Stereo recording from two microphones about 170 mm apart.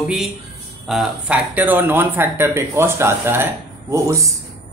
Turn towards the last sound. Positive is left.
turn(degrees=-15)  # may be behind; listen again after turning